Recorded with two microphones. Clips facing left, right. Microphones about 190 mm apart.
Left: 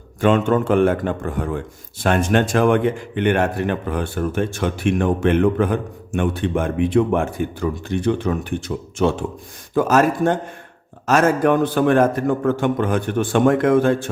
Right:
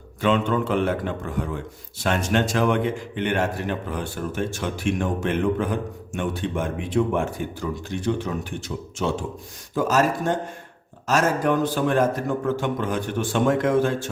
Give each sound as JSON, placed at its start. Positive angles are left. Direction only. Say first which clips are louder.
{"t": 0.2, "sound": "a man's voice", "louder": "left 5 dB", "side_deg": 50}